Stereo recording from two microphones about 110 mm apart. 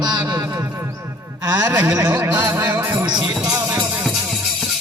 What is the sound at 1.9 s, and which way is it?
Music, 30° right (ahead or behind).